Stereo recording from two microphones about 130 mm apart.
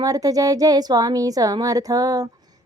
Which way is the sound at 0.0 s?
30° right (ahead or behind).